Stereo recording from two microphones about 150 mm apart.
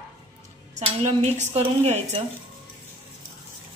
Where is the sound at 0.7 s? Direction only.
45° right (ahead or behind).